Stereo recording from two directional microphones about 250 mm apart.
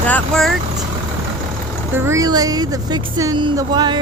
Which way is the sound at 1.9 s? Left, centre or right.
Centre.